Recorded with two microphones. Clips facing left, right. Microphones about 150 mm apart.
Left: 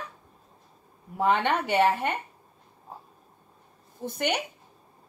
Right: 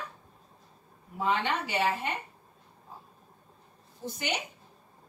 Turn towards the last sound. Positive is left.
turn(degrees=55)  # may be behind; listen again after turning